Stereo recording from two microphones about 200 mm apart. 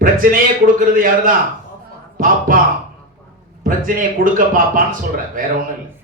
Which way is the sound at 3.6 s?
45° right (ahead or behind).